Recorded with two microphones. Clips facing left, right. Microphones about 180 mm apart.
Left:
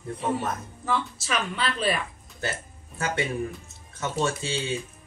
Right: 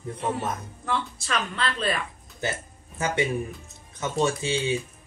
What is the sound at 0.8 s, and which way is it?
Speech, 5° left (ahead or behind).